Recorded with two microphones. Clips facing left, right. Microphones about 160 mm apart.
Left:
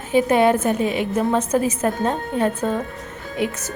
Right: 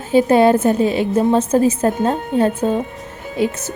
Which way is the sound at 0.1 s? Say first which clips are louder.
Right 4 dB; 30° right (ahead or behind).